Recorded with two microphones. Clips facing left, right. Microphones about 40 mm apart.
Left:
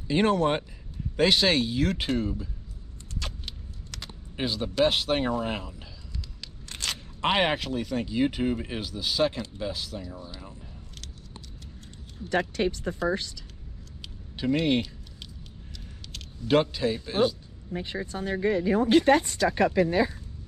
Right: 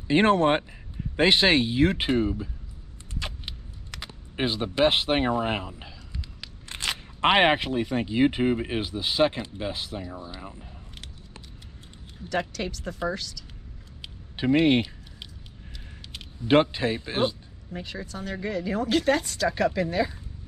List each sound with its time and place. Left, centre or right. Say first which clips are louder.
0.1 s speech: right 3 dB; right
3.2 s a sound: right 2 dB; right
6.4 s speech: right 3 dB; right
12.3 s speech: left 3 dB; left
14.0 s a sound: right 3 dB; right
16.1 s speech: right 3 dB; right
17.7 s speech: left 3 dB; left